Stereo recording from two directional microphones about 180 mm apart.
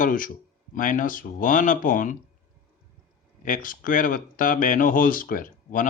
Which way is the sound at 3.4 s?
50° left (ahead or behind).